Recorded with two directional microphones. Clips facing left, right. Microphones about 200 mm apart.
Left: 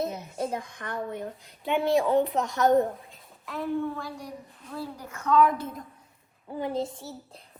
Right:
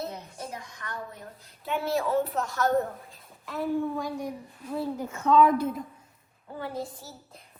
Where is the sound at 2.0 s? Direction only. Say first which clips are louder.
Left 3 dB; 20° left (ahead or behind).